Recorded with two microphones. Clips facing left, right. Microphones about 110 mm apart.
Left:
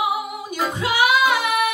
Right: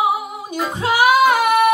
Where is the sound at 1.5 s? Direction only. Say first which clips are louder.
Right 7 dB; 35° right (ahead or behind).